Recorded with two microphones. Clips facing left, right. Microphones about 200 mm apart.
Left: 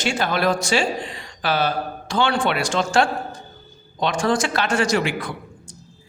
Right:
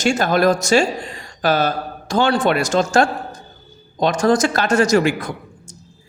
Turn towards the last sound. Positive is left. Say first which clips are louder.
# right 3 dB
turn(degrees=-45)  # may be behind; listen again after turning